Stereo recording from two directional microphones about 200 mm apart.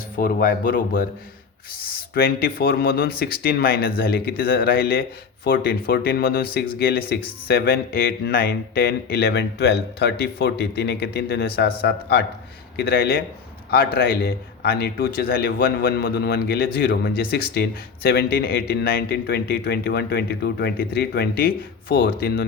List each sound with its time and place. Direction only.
0.2 s speech: 45° left (ahead or behind)
2.1 s speech: 50° left (ahead or behind)